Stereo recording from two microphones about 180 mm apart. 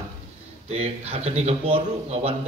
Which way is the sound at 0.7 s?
35° right (ahead or behind).